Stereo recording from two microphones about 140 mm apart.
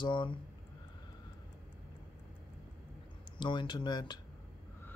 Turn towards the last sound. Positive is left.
turn(degrees=30)  # may be behind; listen again after turning